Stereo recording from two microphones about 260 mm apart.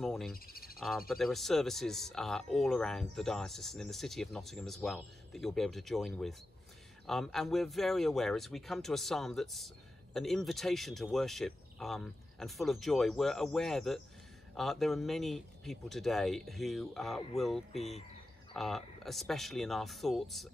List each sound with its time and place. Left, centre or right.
0.0 s speech: centre
0.3 s speech: left
0.7 s speech: centre